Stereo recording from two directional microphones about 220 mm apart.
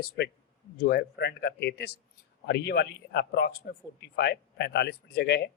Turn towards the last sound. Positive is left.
turn(degrees=50)  # may be behind; listen again after turning